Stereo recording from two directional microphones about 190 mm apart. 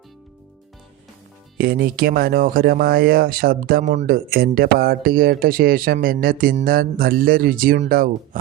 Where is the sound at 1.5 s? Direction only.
50° right (ahead or behind).